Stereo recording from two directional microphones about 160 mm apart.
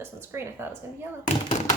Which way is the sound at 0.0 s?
15° right (ahead or behind).